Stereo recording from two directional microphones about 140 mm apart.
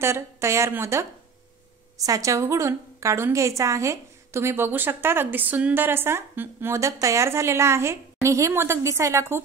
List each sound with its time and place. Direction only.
0.0 s a woman's voice: 20° right (ahead or behind)